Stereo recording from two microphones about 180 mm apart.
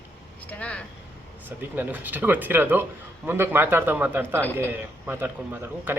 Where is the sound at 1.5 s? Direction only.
10° right (ahead or behind).